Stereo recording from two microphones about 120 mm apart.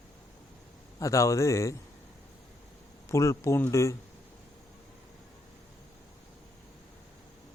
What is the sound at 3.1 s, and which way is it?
Speech, 25° left (ahead or behind).